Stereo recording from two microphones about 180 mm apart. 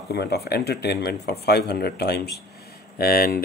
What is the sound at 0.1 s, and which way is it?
Speech, 65° left (ahead or behind).